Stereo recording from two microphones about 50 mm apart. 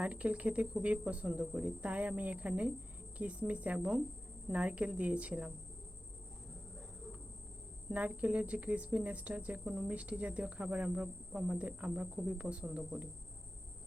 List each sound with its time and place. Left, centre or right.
0.0 s speech: right
7.9 s speech: right
9.6 s speech: centre